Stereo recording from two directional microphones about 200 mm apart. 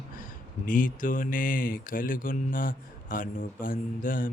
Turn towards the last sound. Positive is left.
turn(degrees=45)  # may be behind; listen again after turning